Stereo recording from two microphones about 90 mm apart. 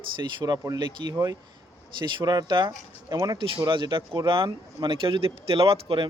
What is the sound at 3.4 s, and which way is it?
Speech, 70° right (ahead or behind).